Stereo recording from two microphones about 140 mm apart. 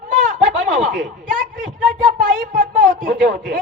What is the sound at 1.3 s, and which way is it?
A woman's voice, 70° right (ahead or behind).